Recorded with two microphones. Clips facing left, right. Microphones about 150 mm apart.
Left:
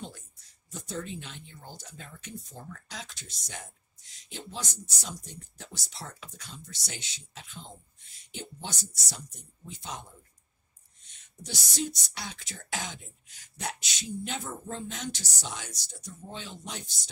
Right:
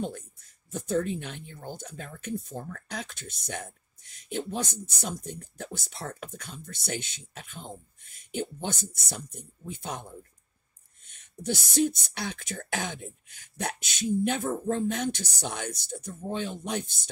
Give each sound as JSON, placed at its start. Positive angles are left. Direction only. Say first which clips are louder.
{"t": 0.0, "sound": "speech", "louder": "right 9 dB", "side_deg": -55}
{"t": 11.1, "sound": "speech", "louder": "right 11 dB", "side_deg": -55}